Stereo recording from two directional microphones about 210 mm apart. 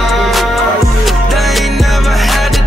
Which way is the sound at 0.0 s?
Centre (ahead or behind).